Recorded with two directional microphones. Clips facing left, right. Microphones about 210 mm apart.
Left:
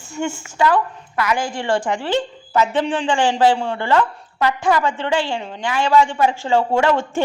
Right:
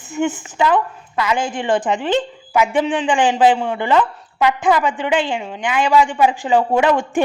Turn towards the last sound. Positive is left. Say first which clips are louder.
# right 2 dB
turn(degrees=-15)  # may be behind; listen again after turning